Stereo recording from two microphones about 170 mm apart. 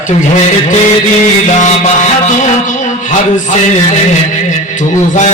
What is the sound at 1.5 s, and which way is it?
Music, 45° left (ahead or behind).